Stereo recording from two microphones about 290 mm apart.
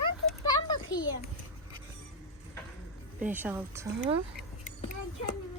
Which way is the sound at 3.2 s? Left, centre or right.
Centre.